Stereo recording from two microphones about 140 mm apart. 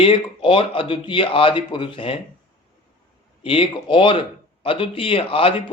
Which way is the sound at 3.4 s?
40° left (ahead or behind).